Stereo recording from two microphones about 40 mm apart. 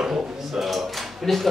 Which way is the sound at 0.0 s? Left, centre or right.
Centre.